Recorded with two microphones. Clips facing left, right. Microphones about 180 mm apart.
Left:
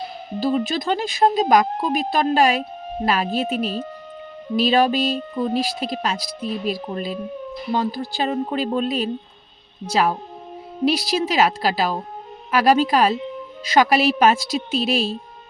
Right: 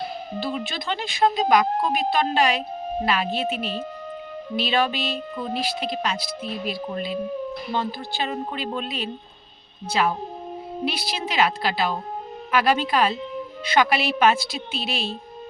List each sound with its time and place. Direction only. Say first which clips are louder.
0.3 s speech: left 9 dB; 40° left (ahead or behind)
4.5 s music: left 6 dB; 40° left (ahead or behind)
5.3 s speech: left 5 dB; 40° left (ahead or behind)